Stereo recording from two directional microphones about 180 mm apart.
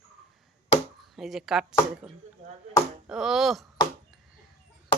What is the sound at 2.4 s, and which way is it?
Speech, 40° right (ahead or behind).